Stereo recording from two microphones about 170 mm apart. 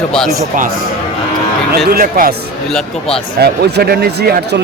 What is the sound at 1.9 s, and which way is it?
Speech, 60° right (ahead or behind).